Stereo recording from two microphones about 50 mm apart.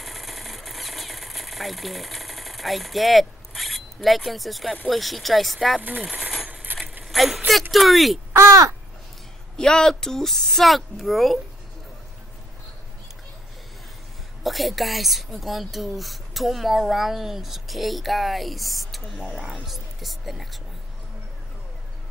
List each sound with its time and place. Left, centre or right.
0.0 s a sound: centre
4.8 s a woman's voice: centre
5.8 s speech: right
6.4 s coin: right
7.1 s a sound: centre
7.7 s a woman's voice: centre
8.3 s speech: right
9.6 s a woman's voice: centre
14.4 s a woman's voice: centre